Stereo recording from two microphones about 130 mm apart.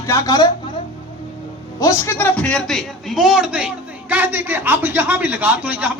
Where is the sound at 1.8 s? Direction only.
25° left (ahead or behind).